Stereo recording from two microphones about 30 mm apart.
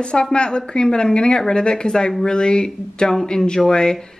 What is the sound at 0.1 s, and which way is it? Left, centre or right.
A woman's voice, left.